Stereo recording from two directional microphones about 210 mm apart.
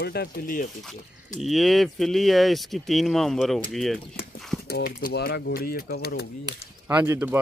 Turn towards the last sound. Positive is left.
turn(degrees=-10)  # may be behind; listen again after turning